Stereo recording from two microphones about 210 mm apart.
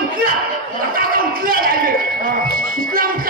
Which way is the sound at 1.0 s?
45° right (ahead or behind).